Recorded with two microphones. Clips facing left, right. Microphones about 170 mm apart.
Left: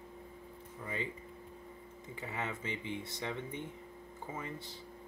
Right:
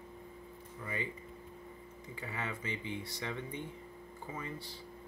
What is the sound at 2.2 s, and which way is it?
Speech, 20° left (ahead or behind).